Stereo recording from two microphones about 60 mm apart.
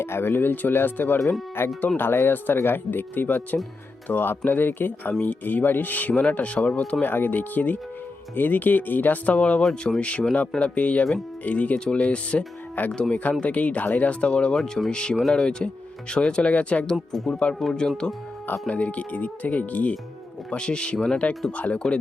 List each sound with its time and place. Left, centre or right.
0.0 s speech: left; by 17.0 s centre
17.1 s speech: centre
18.7 s speech: left